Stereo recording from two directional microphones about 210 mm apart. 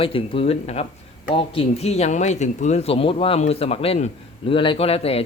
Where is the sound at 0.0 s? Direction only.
25° left (ahead or behind).